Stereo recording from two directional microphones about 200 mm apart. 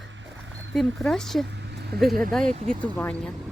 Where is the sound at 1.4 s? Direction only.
55° right (ahead or behind).